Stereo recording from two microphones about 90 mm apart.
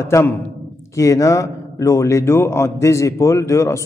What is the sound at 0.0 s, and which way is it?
A man's voice, 30° left (ahead or behind).